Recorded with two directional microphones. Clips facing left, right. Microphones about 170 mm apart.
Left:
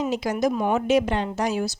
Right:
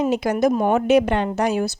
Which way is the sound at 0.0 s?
60° right (ahead or behind).